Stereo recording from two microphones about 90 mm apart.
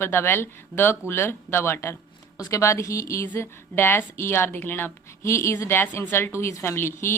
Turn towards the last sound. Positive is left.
turn(degrees=25)  # may be behind; listen again after turning